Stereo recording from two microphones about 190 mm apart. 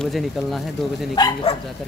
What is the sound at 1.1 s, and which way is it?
Speech, 20° left (ahead or behind).